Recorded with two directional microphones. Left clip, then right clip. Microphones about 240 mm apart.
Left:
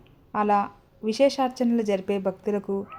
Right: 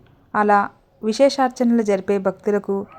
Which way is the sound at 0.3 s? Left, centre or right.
Centre.